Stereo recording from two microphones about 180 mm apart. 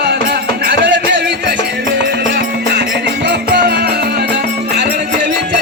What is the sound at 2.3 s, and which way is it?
Music, 65° right (ahead or behind).